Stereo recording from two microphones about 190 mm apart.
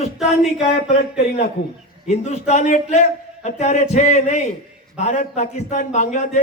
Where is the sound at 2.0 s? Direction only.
35° left (ahead or behind).